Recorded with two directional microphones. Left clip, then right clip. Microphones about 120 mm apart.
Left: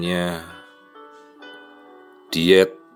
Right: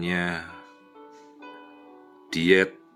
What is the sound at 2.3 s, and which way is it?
Speech, 40° left (ahead or behind).